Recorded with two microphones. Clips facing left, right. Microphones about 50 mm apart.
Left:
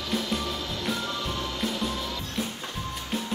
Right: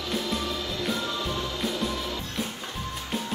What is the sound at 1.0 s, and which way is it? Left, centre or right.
Music, left.